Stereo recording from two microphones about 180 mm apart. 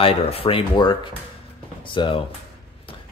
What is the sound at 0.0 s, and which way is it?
Speech, 30° left (ahead or behind).